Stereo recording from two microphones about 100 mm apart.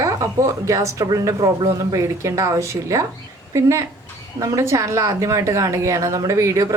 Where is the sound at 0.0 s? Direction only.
35° right (ahead or behind).